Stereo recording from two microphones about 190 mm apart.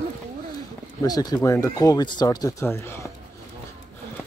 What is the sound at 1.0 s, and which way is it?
Speech, 20° left (ahead or behind).